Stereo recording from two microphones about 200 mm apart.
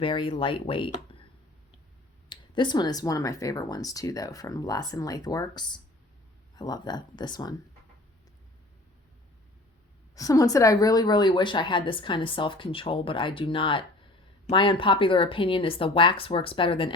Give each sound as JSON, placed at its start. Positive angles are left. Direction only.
{"t": 0.0, "sound": "a woman's voice", "side_deg": 25}
{"t": 2.3, "sound": "a woman's voice", "side_deg": 20}
{"t": 10.2, "sound": "a woman's voice", "side_deg": 15}